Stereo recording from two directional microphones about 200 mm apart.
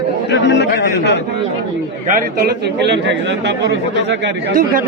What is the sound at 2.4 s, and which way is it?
Speech, 60° right (ahead or behind).